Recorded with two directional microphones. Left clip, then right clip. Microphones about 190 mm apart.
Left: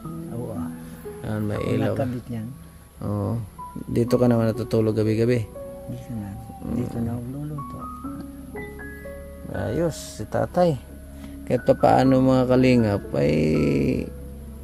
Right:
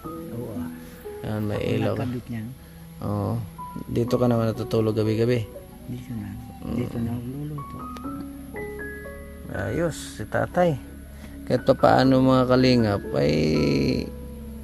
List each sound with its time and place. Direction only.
1.2 s a man's voice: 10° left (ahead or behind)
4.1 s a man's voice: 25° left (ahead or behind)
6.6 s a man's voice: 10° left (ahead or behind)
9.6 s a man's voice: 15° left (ahead or behind)